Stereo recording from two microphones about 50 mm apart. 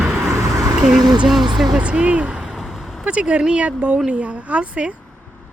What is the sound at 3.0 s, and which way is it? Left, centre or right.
Speech, right.